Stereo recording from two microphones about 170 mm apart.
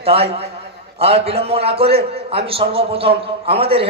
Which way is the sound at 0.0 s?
35° right (ahead or behind).